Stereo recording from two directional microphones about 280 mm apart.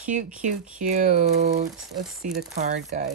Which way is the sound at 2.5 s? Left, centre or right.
Right.